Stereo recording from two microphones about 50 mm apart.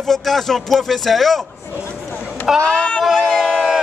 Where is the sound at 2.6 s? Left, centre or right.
Left.